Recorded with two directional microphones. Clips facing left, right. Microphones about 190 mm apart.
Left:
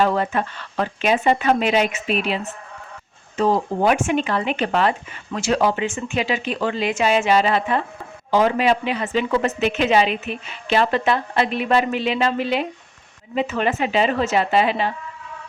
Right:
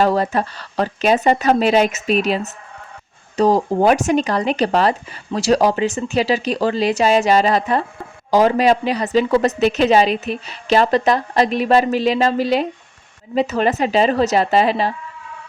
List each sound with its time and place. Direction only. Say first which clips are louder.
0.0 s speech: right 3 dB; 35° right (ahead or behind)